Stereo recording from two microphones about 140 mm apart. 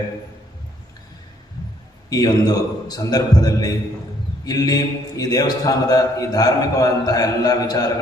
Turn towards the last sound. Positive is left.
turn(degrees=25)  # may be behind; listen again after turning